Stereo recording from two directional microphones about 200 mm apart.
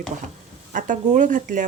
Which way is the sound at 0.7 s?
40° right (ahead or behind).